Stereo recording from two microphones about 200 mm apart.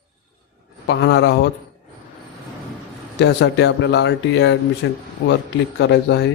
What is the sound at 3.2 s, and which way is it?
Speech, 60° left (ahead or behind).